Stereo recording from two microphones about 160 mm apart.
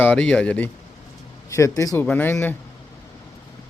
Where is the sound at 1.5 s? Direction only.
20° left (ahead or behind).